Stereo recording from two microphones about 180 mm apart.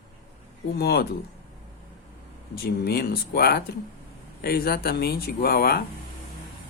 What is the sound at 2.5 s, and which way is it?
Speech, 60° left (ahead or behind).